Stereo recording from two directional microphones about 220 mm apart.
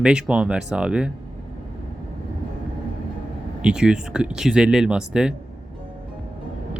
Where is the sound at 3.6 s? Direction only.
5° right (ahead or behind).